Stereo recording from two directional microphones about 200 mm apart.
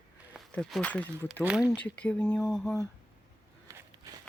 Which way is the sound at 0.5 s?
5° left (ahead or behind).